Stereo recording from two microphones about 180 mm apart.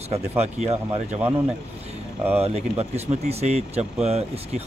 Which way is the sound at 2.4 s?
35° right (ahead or behind).